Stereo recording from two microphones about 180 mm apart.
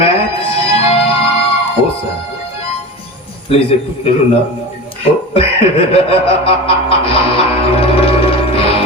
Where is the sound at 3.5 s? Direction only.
30° left (ahead or behind).